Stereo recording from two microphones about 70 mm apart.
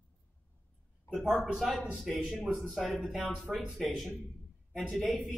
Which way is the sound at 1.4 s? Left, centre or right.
Centre.